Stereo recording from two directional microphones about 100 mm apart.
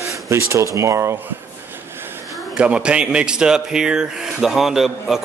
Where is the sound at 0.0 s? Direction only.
30° right (ahead or behind).